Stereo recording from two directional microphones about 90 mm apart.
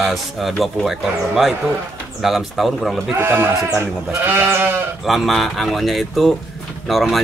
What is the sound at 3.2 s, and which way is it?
Goat, 25° right (ahead or behind).